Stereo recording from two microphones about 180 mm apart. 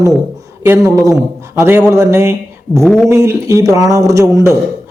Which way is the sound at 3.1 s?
15° right (ahead or behind).